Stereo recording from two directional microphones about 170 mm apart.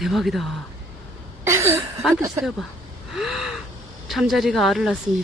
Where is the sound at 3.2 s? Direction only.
Centre (ahead or behind).